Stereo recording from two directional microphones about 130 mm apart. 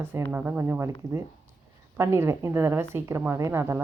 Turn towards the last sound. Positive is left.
turn(degrees=-20)  # may be behind; listen again after turning